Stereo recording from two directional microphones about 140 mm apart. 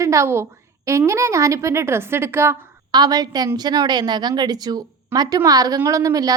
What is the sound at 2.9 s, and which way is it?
A woman's voice, 30° right (ahead or behind).